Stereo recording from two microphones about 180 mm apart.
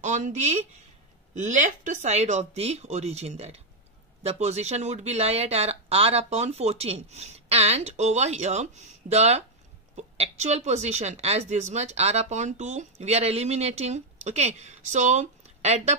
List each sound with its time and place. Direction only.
0.0 s speech: 40° right (ahead or behind)